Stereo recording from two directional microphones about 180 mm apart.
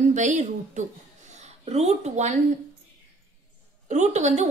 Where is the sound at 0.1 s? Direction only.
40° right (ahead or behind).